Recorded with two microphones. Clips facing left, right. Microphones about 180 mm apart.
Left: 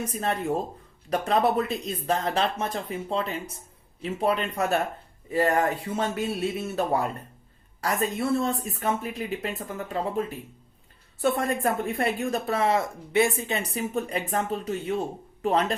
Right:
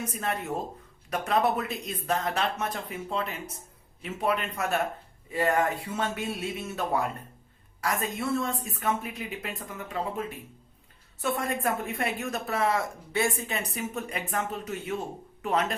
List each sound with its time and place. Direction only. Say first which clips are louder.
0.1 s a woman's voice: left 4 dB; 30° left (ahead or behind)